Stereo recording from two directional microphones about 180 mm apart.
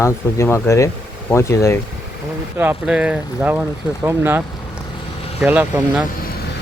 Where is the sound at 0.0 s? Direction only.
15° left (ahead or behind).